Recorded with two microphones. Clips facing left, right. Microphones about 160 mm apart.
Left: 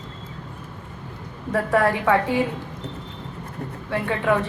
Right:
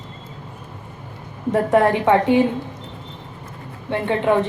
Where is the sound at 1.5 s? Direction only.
25° right (ahead or behind).